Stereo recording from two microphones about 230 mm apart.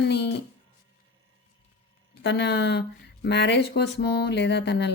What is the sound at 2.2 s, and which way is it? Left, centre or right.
Speech, left.